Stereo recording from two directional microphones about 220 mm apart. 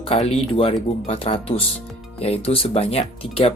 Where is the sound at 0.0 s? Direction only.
25° left (ahead or behind).